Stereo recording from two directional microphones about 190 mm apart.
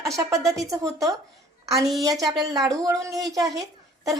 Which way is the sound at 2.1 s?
Centre (ahead or behind).